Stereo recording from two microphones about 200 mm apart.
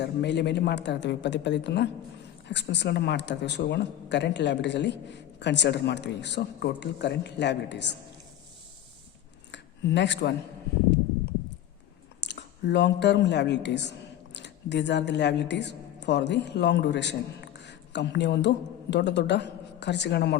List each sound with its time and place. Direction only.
0.0 s speech: 55° left (ahead or behind)
9.5 s a sound: 60° left (ahead or behind)
12.2 s a man's voice: 60° left (ahead or behind)